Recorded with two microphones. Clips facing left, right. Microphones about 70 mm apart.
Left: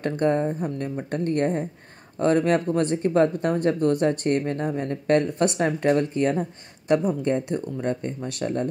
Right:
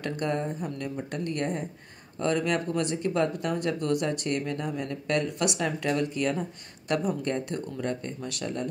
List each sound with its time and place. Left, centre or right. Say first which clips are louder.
0.0 s speech: left 7 dB; left
7.2 s speech: left 6 dB; left